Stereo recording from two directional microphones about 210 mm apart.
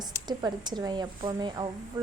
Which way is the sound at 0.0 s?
20° right (ahead or behind).